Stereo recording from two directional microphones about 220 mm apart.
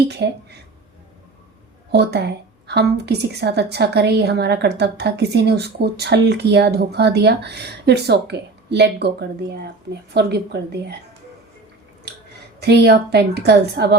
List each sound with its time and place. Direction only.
0.0 s a woman's voice: 50° right (ahead or behind)
1.9 s a woman's voice: 50° right (ahead or behind)
12.5 s a woman's voice: 50° right (ahead or behind)